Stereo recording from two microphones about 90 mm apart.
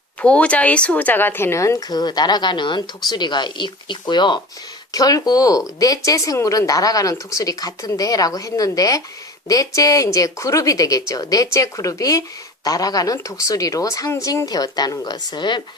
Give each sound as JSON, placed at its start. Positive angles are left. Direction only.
{"t": 0.2, "sound": "speech", "side_deg": 15}
{"t": 4.9, "sound": "a woman's voice", "side_deg": 45}